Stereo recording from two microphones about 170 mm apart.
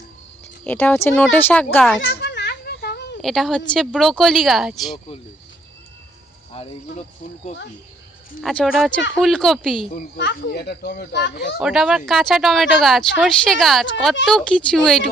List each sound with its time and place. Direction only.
0.6 s speech: 10° left (ahead or behind)
2.0 s children playing: 70° left (ahead or behind)
3.2 s speech: centre (ahead or behind)
6.5 s speech: 35° left (ahead or behind)
8.4 s speech: centre (ahead or behind)
10.2 s a child's voice: 80° left
11.6 s speech: 5° right (ahead or behind)